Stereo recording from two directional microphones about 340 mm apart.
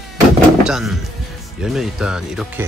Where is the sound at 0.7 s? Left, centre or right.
Centre.